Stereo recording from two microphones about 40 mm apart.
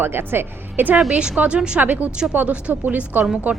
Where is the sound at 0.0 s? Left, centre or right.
Right.